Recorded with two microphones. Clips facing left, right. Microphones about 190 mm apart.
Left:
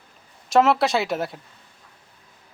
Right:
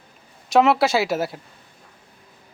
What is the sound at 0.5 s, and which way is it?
Speech, centre (ahead or behind).